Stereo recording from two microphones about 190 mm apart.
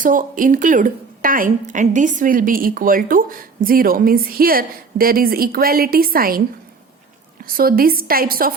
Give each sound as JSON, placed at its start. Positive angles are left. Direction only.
{"t": 0.0, "sound": "a woman's voice", "side_deg": -45}
{"t": 7.4, "sound": "a woman's voice", "side_deg": -50}